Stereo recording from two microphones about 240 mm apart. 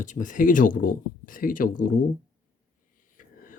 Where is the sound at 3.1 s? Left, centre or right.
Left.